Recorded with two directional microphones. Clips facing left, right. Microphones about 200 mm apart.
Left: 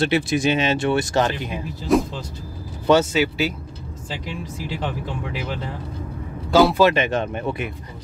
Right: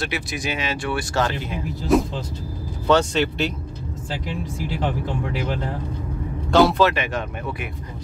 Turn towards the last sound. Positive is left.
turn(degrees=25)  # may be behind; listen again after turning